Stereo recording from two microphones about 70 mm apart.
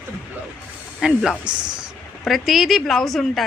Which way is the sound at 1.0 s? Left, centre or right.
Centre.